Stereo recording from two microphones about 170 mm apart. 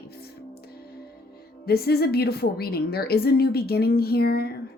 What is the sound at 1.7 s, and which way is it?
A woman's voice, 65° left (ahead or behind).